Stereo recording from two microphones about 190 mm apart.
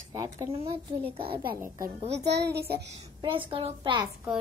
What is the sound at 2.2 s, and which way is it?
Speech, 60° right (ahead or behind).